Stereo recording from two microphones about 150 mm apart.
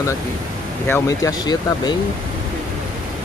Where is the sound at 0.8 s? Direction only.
20° left (ahead or behind).